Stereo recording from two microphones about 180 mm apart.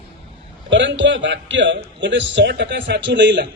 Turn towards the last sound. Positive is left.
turn(degrees=-80)